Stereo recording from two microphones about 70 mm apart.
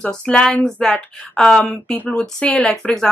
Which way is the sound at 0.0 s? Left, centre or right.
Centre.